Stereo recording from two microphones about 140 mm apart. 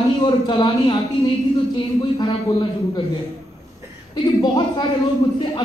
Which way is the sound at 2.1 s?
30° left (ahead or behind).